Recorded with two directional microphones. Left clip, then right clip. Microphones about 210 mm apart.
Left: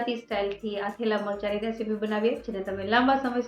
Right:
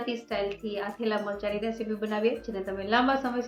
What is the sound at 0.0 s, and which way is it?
A woman's voice, centre (ahead or behind).